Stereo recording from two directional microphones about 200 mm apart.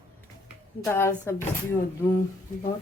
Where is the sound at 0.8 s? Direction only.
10° left (ahead or behind).